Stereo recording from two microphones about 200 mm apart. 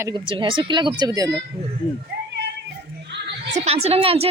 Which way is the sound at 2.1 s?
55° right (ahead or behind).